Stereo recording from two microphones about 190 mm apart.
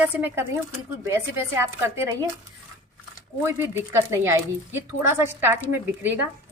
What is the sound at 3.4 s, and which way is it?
Speech, 15° right (ahead or behind).